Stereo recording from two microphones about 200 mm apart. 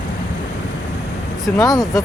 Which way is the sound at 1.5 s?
20° left (ahead or behind).